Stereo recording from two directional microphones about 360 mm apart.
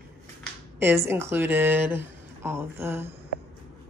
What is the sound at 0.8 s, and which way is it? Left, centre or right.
A woman's voice, centre.